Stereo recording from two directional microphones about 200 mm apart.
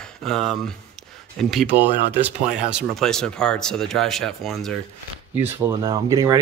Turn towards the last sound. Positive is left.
turn(degrees=-15)  # may be behind; listen again after turning